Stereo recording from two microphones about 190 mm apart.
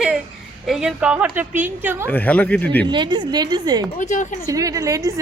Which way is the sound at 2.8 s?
25° right (ahead or behind).